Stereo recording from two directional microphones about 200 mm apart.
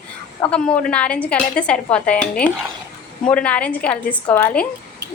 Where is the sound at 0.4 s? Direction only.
5° left (ahead or behind).